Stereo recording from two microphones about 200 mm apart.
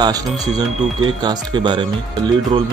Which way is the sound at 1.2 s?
20° right (ahead or behind).